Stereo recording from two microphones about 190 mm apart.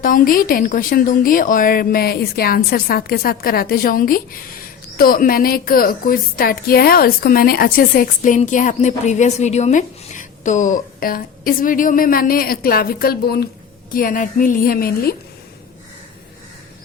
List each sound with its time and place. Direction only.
0.0 s a woman's voice: 45° left (ahead or behind)